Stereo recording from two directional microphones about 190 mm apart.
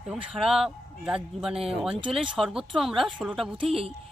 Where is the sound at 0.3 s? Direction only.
Centre (ahead or behind).